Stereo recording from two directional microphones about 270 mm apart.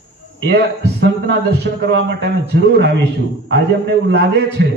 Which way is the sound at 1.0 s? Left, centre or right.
Right.